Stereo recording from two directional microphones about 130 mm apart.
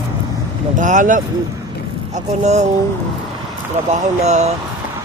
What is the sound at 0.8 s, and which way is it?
Speech, 80° right.